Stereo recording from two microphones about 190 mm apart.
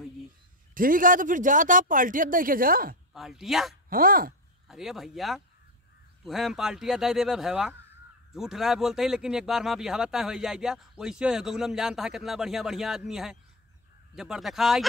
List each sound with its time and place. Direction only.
0.7 s speech: 45° right (ahead or behind)
3.1 s speech: centre (ahead or behind)
3.9 s speech: 50° right (ahead or behind)
4.6 s speech: centre (ahead or behind)